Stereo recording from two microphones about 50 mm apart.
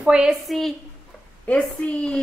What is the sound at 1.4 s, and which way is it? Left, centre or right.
Speech, left.